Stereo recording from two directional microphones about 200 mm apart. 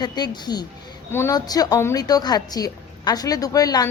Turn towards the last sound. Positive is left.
turn(degrees=20)  # may be behind; listen again after turning